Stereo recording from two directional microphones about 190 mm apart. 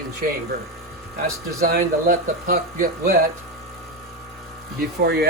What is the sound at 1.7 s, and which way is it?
Speech, 50° right (ahead or behind).